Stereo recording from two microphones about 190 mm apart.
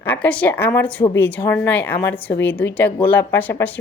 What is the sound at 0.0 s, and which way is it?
A woman's voice, 10° left (ahead or behind).